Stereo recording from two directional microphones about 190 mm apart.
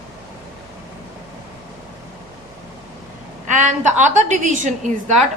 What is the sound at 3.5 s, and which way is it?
A woman's voice, 40° right (ahead or behind).